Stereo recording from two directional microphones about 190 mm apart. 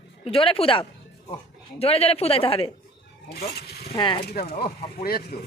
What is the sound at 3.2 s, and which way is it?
Speech, 60° left (ahead or behind).